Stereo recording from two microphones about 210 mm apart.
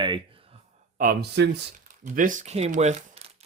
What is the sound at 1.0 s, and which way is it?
Speech, 45° right (ahead or behind).